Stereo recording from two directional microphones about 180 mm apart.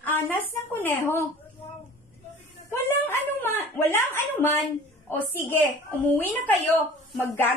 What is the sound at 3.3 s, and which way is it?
A woman's voice, 10° left (ahead or behind).